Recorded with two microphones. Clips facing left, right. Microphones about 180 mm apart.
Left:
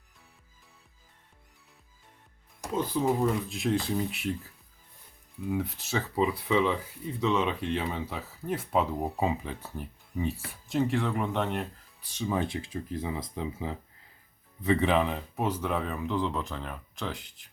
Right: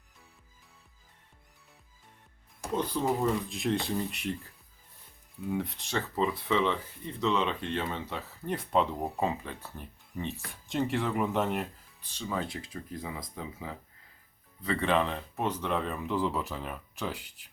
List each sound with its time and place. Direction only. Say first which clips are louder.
2.7 s speech: left 2 dB; 5° left (ahead or behind)
5.5 s speech: left 2 dB; centre (ahead or behind)
12.0 s speech: left 4 dB; 10° left (ahead or behind); by 17.4 s 5° right (ahead or behind)